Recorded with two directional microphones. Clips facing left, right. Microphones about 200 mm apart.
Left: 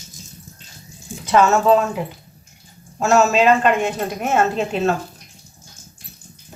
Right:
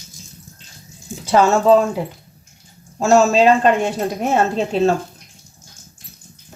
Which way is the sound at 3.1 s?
35° right (ahead or behind).